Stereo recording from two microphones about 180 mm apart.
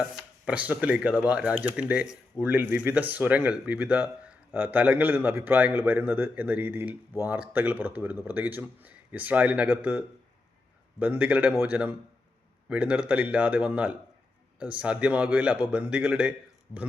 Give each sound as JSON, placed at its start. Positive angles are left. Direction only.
{"t": 0.2, "sound": "speech", "side_deg": -5}
{"t": 11.0, "sound": "speech", "side_deg": -10}